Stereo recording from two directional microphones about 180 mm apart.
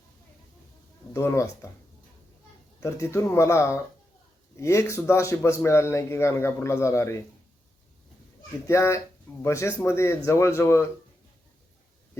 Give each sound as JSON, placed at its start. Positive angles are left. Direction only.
{"t": 1.1, "sound": "a man's voice", "side_deg": 15}
{"t": 2.8, "sound": "a man's voice", "side_deg": 15}
{"t": 8.6, "sound": "a man's voice", "side_deg": 15}